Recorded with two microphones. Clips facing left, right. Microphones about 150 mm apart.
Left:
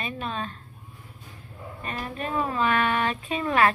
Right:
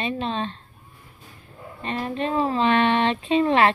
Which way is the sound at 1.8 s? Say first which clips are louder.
Right 6 dB; 25° right (ahead or behind).